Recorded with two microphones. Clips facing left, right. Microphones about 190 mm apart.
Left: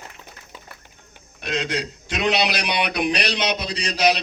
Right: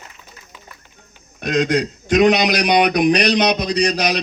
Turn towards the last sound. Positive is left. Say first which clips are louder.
# right 5 dB
turn(degrees=-45)  # may be behind; listen again after turning